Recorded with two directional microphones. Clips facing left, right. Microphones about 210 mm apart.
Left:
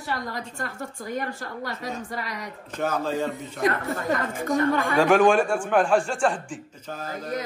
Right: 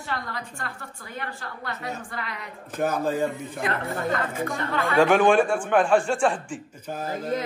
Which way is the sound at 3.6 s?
45° left (ahead or behind).